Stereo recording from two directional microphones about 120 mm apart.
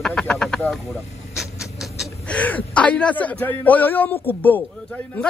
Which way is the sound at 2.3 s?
10° left (ahead or behind).